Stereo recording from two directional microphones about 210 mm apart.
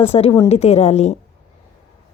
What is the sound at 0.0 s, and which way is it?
A woman's voice, 30° left (ahead or behind).